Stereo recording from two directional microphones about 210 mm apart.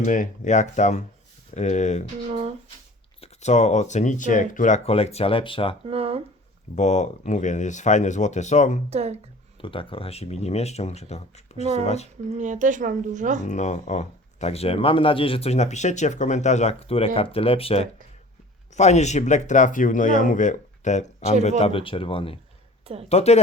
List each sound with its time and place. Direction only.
0.0 s speech: 35° left (ahead or behind)
3.2 s speech: 35° left (ahead or behind)
5.8 s speech: 25° right (ahead or behind)
6.7 s speech: 35° left (ahead or behind)
8.9 s a woman's voice: 30° right (ahead or behind)
9.6 s speech: 25° left (ahead or behind)
12.4 s a woman's voice: 35° right (ahead or behind)
13.5 s speech: 35° left (ahead or behind)